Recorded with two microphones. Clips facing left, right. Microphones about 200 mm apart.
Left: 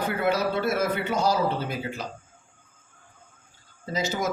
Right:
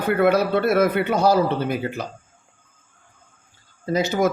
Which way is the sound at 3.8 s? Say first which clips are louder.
Right 7 dB; 60° right (ahead or behind).